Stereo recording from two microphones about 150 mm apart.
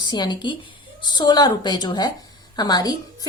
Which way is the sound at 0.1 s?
30° left (ahead or behind).